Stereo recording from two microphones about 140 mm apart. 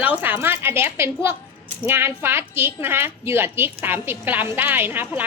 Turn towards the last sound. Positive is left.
turn(degrees=-15)  # may be behind; listen again after turning